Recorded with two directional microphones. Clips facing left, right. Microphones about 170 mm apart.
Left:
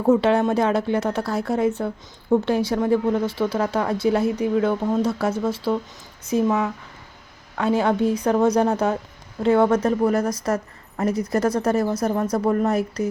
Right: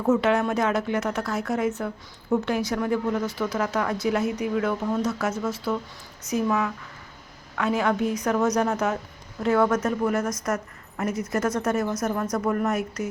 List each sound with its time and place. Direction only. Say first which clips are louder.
0.0 s a woman's voice: left 4 dB; 30° left (ahead or behind)